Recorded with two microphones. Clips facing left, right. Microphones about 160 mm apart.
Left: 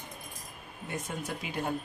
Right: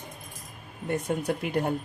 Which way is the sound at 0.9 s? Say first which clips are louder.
Right 9 dB; 60° right (ahead or behind).